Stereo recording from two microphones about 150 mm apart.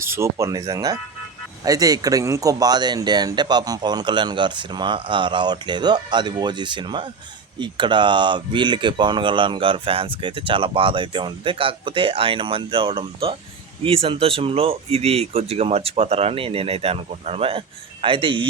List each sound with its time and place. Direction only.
0.0 s speech: 20° right (ahead or behind); by 18.4 s 35° right (ahead or behind)